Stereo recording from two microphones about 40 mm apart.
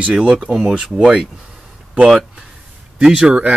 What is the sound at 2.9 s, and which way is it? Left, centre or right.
Speech, centre.